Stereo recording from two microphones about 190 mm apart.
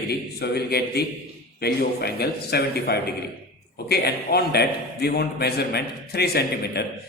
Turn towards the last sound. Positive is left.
turn(degrees=60)  # may be behind; listen again after turning